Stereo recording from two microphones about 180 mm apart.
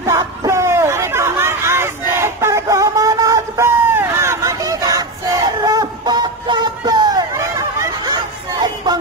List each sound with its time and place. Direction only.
0.0 s chatter: 15° right (ahead or behind)